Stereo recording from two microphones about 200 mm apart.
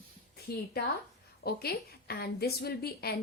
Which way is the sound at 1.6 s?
50° left (ahead or behind).